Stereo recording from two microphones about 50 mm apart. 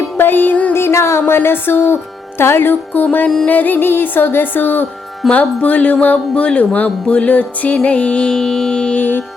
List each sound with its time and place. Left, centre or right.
0.2 s music: left
0.7 s music: left
1.3 s music: left
5.2 s music: centre
5.5 s speech: left
7.9 s music: left
9.0 s music: left